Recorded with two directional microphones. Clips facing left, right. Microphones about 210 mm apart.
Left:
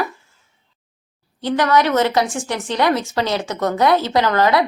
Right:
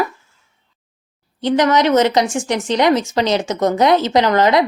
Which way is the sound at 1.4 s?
20° right (ahead or behind).